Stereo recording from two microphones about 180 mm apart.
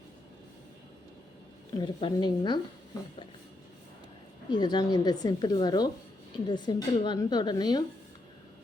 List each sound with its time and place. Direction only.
1.7 s a woman's voice: 25° left (ahead or behind)
4.4 s a woman's voice: 25° left (ahead or behind)